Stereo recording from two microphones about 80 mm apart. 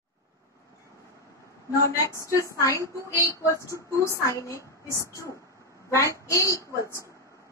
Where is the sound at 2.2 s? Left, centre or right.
Left.